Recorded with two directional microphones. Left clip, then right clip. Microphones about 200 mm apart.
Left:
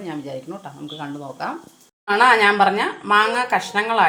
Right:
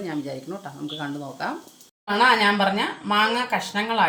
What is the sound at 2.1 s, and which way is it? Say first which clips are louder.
Speech: left 4 dB; 20° left (ahead or behind).